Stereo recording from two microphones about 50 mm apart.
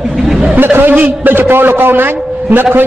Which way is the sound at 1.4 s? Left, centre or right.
Right.